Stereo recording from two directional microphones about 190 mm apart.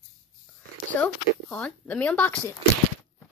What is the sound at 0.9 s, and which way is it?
Speech, 5° left (ahead or behind).